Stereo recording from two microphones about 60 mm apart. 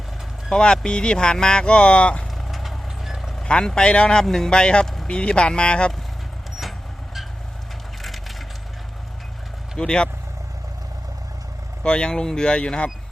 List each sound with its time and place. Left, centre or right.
0.5 s speech: centre
2.5 s vehicle: centre
3.3 s speech: centre
6.6 s vehicle: centre
8.0 s splinter: centre
9.7 s speech: centre
11.8 s speech: centre